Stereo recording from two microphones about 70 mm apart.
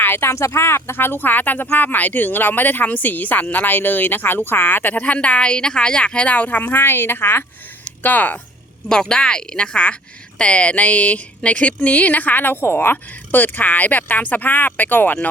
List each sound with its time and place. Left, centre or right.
0.0 s a sound: left
0.3 s speech: left
8.9 s speech: centre